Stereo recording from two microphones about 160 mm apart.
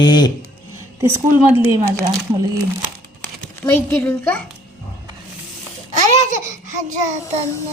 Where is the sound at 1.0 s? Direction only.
15° right (ahead or behind).